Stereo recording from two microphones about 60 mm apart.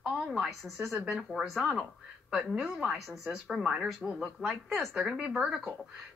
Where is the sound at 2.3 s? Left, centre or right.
Centre.